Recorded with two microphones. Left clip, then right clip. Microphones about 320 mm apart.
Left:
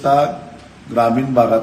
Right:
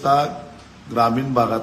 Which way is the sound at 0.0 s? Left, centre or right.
Centre.